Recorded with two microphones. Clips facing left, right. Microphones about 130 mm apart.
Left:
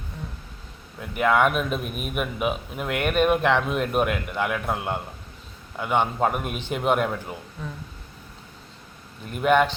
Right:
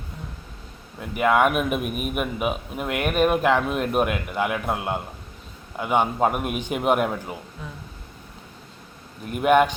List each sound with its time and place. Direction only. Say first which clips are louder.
0.9 s speech: right 1 dB; centre (ahead or behind)
9.3 s speech: right 2 dB; 5° right (ahead or behind)